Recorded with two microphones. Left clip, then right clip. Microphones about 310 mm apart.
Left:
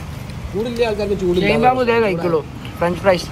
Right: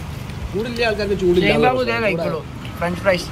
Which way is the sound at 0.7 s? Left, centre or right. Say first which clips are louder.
Left 1 dB; centre.